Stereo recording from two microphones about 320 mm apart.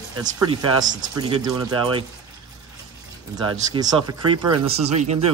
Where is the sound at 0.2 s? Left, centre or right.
Centre.